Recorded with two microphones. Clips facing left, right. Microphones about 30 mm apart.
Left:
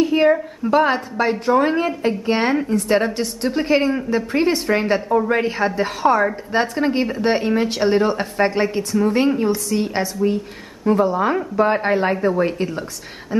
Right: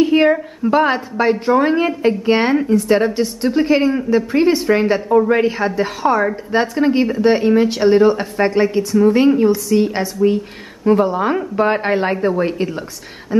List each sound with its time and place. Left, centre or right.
0.0 s a woman's voice: centre
10.9 s a woman's voice: centre